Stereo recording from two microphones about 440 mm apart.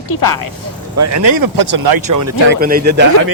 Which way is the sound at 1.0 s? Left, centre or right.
Right.